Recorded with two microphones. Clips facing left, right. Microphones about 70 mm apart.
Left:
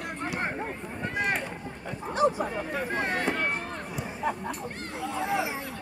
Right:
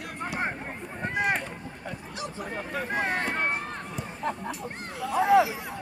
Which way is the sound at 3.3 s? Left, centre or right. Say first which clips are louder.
Right 1 dB; right.